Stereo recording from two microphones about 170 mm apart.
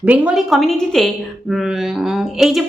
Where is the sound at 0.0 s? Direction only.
5° right (ahead or behind).